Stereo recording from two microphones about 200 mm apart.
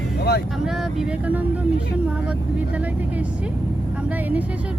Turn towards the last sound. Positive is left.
turn(degrees=-10)  # may be behind; listen again after turning